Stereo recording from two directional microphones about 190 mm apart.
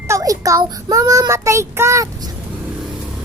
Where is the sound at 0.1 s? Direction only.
20° right (ahead or behind).